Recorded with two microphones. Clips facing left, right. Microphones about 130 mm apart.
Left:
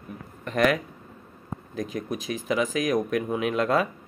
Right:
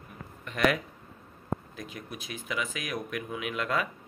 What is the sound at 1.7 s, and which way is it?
Speech, 40° left (ahead or behind).